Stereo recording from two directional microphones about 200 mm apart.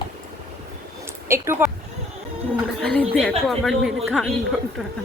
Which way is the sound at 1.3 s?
15° right (ahead or behind).